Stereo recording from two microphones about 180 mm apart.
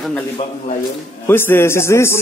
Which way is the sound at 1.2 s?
10° left (ahead or behind).